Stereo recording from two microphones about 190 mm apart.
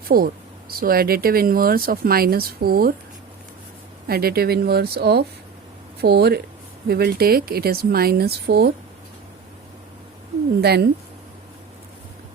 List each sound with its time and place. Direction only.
0.1 s speech: 50° right (ahead or behind)
4.0 s speech: 55° right (ahead or behind)
10.6 s speech: 60° right (ahead or behind)